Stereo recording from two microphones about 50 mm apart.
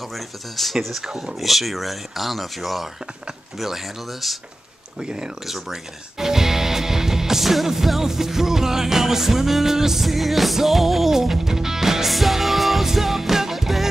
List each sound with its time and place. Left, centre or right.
0.1 s speech: centre
5.0 s speech: centre